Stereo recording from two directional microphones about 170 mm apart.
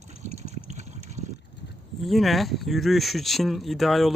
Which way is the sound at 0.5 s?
40° right (ahead or behind).